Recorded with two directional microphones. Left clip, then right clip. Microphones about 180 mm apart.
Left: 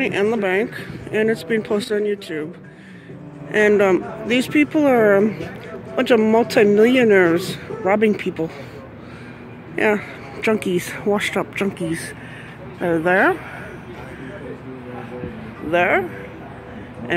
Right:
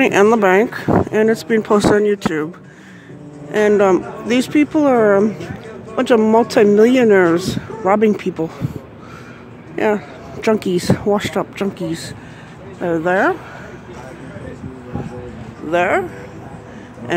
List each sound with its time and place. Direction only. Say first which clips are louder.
0.0 s speech: right 8 dB; 40° right (ahead or behind)
3.5 s speech: right 2 dB; 10° right (ahead or behind)
9.8 s speech: right 1 dB; 10° right (ahead or behind)
12.8 s speech: right 1 dB; centre (ahead or behind)
15.7 s speech: right 1 dB; 10° right (ahead or behind)